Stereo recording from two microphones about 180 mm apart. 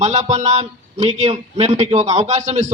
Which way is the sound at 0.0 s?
40° right (ahead or behind).